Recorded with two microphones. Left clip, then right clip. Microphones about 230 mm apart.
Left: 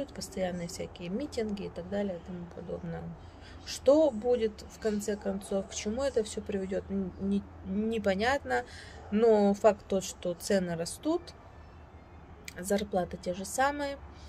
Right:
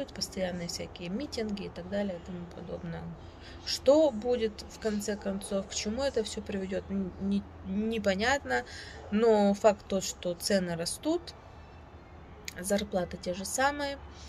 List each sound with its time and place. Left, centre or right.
0.0 s speech: centre
12.4 s speech: centre